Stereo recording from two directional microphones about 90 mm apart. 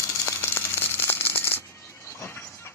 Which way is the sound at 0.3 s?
25° left (ahead or behind).